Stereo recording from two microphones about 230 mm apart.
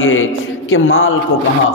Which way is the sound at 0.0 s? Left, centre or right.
Left.